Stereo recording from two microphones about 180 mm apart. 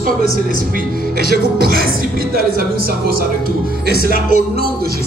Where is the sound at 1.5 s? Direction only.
55° right (ahead or behind).